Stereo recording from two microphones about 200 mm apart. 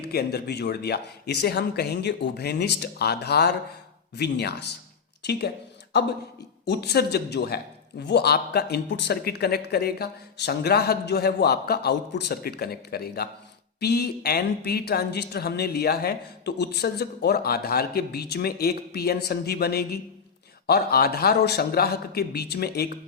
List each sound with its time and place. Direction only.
0.0 s speech: 50° left (ahead or behind)
6.7 s a man's voice: 55° left (ahead or behind)